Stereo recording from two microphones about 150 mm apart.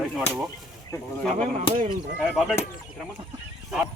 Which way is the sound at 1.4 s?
55° right (ahead or behind).